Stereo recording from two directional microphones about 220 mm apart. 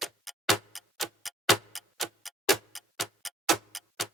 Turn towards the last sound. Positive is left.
turn(degrees=0)  # may be behind; listen again after turning